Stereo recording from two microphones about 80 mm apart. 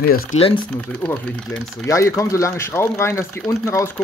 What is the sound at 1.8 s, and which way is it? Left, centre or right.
Speech, left.